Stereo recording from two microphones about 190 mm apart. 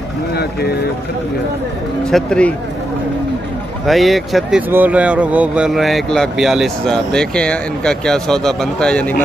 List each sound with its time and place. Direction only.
0.4 s speech: 55° left (ahead or behind)
2.0 s speech: 5° left (ahead or behind)
3.8 s speech: centre (ahead or behind)